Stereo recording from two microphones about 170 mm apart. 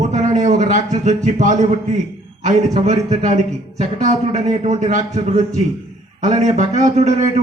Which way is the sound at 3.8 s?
45° right (ahead or behind).